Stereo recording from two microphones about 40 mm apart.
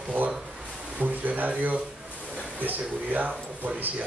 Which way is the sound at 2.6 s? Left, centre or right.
Right.